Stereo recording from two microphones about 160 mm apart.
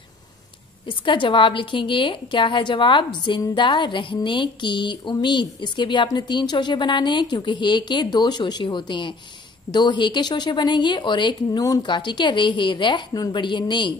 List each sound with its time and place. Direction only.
0.8 s a woman's voice: 30° left (ahead or behind)